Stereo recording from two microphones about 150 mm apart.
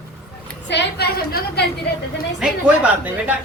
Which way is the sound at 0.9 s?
90° left.